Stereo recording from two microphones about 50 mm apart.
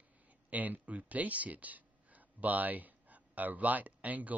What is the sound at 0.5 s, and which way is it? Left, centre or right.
Speech, right.